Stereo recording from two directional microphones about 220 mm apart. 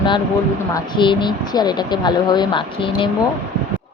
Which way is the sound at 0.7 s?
20° left (ahead or behind).